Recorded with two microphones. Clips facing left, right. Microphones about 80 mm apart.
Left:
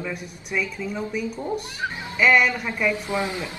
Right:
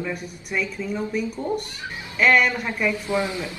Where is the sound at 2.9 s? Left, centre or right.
Left.